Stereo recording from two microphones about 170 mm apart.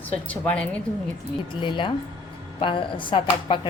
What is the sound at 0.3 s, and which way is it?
Speech, 5° left (ahead or behind).